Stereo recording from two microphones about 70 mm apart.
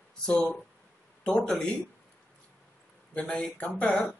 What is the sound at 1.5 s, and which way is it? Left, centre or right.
Speech, centre.